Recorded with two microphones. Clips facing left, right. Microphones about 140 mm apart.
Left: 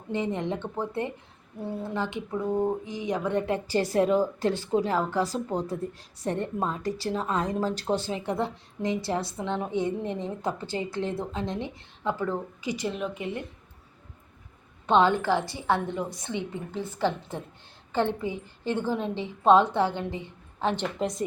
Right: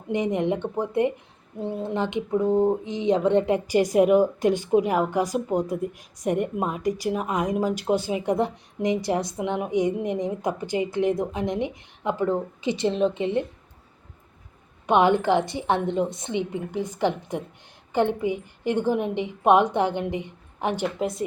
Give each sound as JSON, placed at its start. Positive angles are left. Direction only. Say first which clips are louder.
{"t": 0.1, "sound": "speech", "louder": "right 5 dB", "side_deg": -15}
{"t": 14.8, "sound": "a woman's voice", "louder": "right 3 dB", "side_deg": -15}
{"t": 21.0, "sound": "speech", "louder": "right 2 dB", "side_deg": -5}